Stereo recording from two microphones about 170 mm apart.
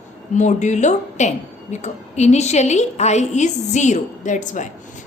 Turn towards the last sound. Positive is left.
turn(degrees=45)  # may be behind; listen again after turning